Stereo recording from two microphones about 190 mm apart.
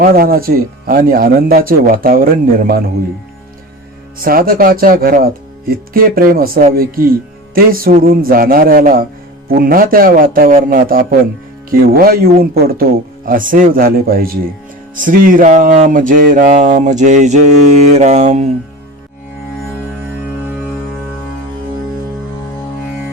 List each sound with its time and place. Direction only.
0.0 s speech: 50° right (ahead or behind)
4.2 s speech: 50° right (ahead or behind)
17.9 s mantra: 35° right (ahead or behind)